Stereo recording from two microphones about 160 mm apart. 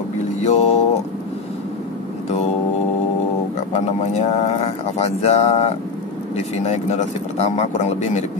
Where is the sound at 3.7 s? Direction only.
45° left (ahead or behind).